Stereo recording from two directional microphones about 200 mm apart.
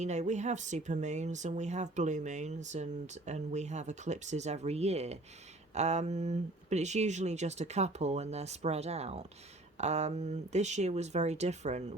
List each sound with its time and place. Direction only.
0.0 s speech: 35° right (ahead or behind)